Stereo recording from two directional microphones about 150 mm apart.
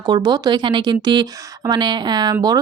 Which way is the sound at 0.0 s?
30° right (ahead or behind).